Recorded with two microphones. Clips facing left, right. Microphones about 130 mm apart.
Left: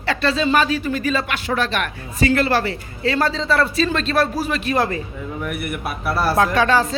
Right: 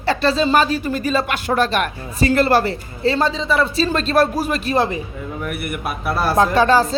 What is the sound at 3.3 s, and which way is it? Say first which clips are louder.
Speech: even; 15° right (ahead or behind).